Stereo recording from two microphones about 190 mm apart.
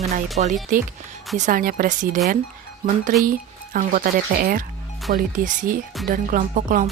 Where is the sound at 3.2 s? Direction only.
45° right (ahead or behind).